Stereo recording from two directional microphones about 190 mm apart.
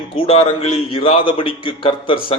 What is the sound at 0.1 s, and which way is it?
A man's voice, 30° left (ahead or behind).